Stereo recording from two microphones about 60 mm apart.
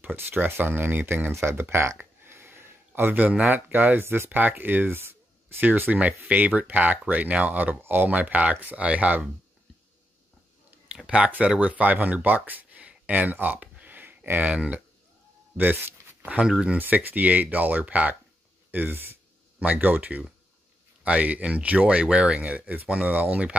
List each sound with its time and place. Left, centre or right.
0.0 s speech: right
11.1 s speech: centre
15.5 s a sound: right
16.4 s speech: centre
16.7 s speech: right